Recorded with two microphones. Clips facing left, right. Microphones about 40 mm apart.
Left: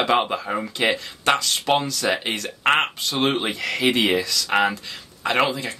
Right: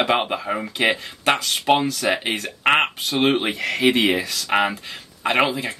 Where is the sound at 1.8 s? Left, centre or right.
Right.